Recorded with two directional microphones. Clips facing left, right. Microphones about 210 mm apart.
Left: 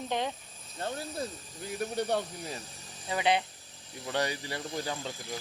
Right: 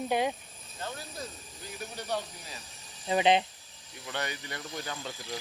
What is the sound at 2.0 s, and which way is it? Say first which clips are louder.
Speech: left 3 dB; 55° left (ahead or behind).